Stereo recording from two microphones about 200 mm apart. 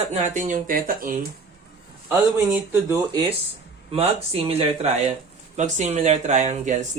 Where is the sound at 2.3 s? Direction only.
10° right (ahead or behind).